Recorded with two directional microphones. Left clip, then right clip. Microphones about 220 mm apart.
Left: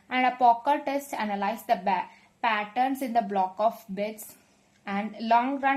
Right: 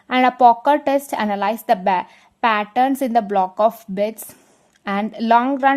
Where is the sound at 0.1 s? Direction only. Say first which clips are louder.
Right 9 dB; 50° right (ahead or behind).